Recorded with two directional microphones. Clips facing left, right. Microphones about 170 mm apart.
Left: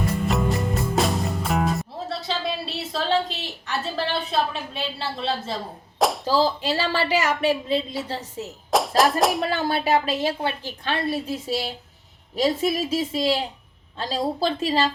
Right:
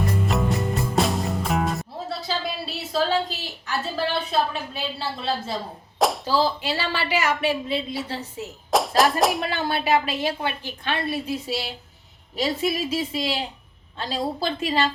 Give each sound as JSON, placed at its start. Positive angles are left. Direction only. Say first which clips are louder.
{"t": 0.3, "sound": "music", "louder": "left 1 dB", "side_deg": 0}
{"t": 6.2, "sound": "speech", "louder": "left 1 dB", "side_deg": 40}
{"t": 8.7, "sound": "speech", "louder": "even", "side_deg": 0}
{"t": 9.5, "sound": "a woman's voice", "louder": "left 1 dB", "side_deg": 40}